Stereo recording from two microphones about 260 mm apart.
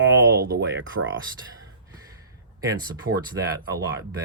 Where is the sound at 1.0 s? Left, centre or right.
Right.